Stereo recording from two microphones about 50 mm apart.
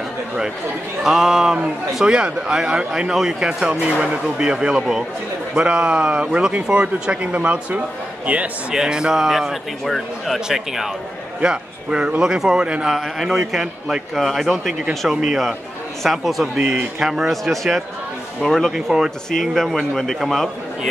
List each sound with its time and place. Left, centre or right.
1.0 s a man's voice: centre; by 8.4 s right
8.7 s speech: centre
11.4 s a man's voice: centre
12.9 s speech: centre
16.5 s speech: right
17.0 s speech: centre